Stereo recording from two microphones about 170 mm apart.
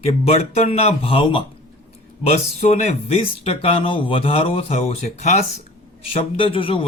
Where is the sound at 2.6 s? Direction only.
40° left (ahead or behind).